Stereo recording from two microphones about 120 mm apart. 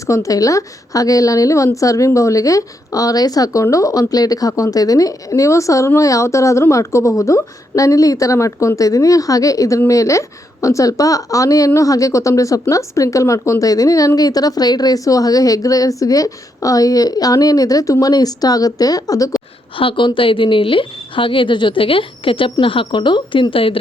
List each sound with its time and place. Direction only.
0.1 s a woman's voice: 30° left (ahead or behind)
19.7 s a woman's voice: 45° left (ahead or behind)